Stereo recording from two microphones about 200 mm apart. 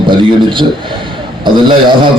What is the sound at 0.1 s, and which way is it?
A man's voice, 25° right (ahead or behind).